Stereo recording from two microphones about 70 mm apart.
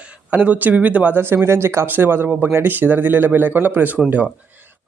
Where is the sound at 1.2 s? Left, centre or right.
Right.